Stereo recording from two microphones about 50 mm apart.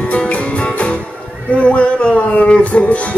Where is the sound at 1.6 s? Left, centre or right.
Left.